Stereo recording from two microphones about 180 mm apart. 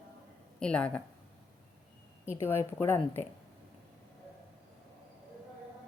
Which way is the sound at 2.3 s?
15° left (ahead or behind).